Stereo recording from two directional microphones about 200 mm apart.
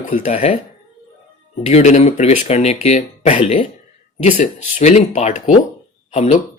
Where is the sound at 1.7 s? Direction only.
35° left (ahead or behind).